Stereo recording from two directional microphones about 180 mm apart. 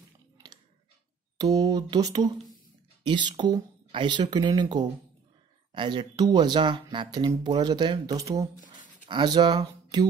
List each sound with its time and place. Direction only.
1.4 s speech: 20° right (ahead or behind)